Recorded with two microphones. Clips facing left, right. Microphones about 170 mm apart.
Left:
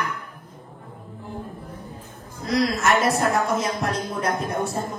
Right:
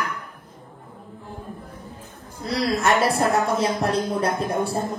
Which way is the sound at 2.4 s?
30° right (ahead or behind).